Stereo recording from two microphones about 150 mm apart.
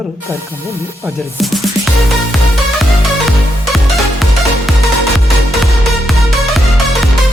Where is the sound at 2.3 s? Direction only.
Centre (ahead or behind).